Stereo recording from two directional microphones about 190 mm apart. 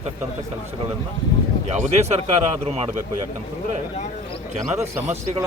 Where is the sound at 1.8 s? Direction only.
35° right (ahead or behind).